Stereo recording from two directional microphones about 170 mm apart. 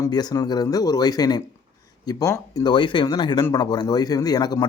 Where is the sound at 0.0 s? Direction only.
25° left (ahead or behind).